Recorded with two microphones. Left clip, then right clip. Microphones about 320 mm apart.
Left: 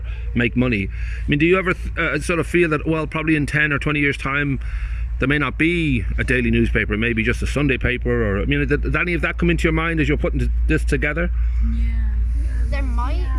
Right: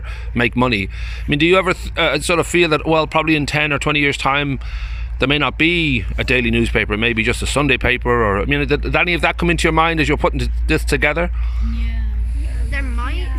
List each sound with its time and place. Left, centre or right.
0.3 s speech: centre